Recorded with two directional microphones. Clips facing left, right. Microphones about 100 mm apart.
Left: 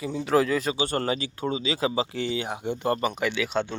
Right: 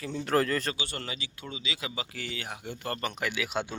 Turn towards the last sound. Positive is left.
turn(degrees=-5)  # may be behind; listen again after turning